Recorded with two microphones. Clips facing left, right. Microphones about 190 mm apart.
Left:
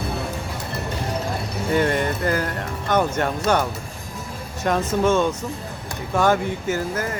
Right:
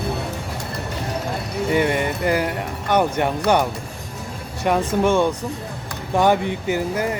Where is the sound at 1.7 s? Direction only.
15° right (ahead or behind).